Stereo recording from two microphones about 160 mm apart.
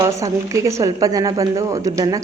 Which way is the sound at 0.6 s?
20° right (ahead or behind).